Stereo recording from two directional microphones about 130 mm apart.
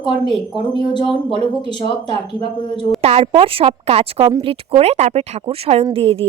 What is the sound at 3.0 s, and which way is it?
Speech, 50° right (ahead or behind).